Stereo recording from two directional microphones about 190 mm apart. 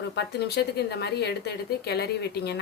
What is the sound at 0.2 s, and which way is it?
Speech, 60° left (ahead or behind).